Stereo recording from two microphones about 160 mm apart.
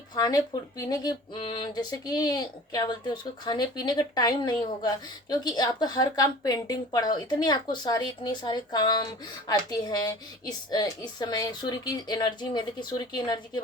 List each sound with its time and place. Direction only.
0.1 s speech: 25° left (ahead or behind)